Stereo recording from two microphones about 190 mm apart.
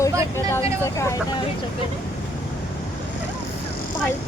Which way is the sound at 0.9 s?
15° left (ahead or behind).